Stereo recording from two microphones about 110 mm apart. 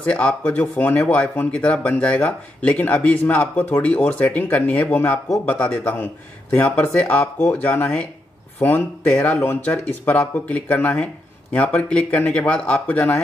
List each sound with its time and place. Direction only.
0.0 s speech: 10° left (ahead or behind)